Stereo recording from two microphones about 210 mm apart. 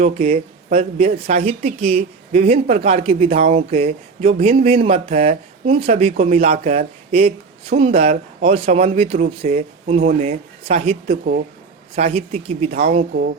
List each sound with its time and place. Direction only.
0.0 s speech: 35° right (ahead or behind)
12.7 s speech: 40° right (ahead or behind)